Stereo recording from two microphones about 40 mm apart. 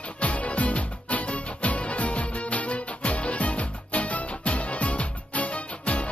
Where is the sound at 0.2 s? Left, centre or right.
Left.